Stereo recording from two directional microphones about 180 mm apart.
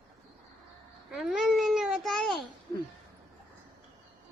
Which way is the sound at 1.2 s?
Centre (ahead or behind).